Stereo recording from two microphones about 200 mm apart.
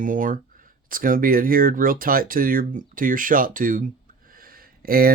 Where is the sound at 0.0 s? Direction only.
40° right (ahead or behind).